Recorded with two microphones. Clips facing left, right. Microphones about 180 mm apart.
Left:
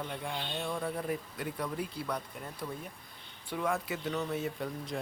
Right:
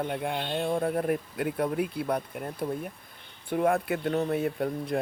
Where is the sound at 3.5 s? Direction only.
55° right (ahead or behind).